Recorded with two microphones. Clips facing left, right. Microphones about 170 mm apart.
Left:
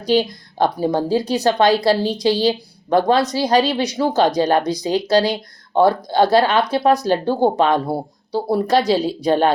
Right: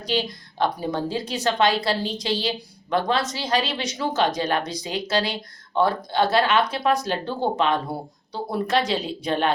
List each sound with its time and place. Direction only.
0.1 s a woman's voice: 40° left (ahead or behind)